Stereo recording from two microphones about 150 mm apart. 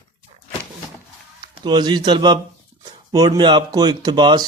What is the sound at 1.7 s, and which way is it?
Speech, 30° right (ahead or behind).